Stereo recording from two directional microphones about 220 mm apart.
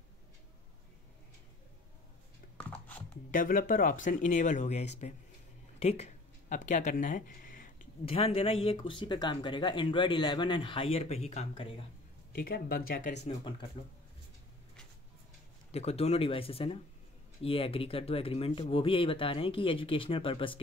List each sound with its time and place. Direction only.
2.5 s a sound: 5° left (ahead or behind)
3.3 s speech: 35° left (ahead or behind)
5.8 s a sound: 30° left (ahead or behind)
8.0 s speech: 25° left (ahead or behind)
12.3 s speech: 40° left (ahead or behind)
13.2 s speech: 20° left (ahead or behind)
15.7 s speech: 30° left (ahead or behind)